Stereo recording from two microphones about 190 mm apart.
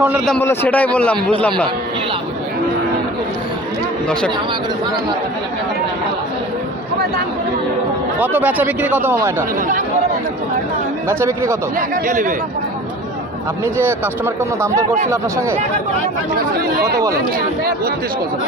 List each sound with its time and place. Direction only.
0.0 s speech: 5° right (ahead or behind)
0.3 s a man's voice: 10° left (ahead or behind)
8.2 s speech: 10° right (ahead or behind)
11.1 s speech: 15° right (ahead or behind)
12.0 s speech: 45° right (ahead or behind)
13.7 s speech: 10° right (ahead or behind)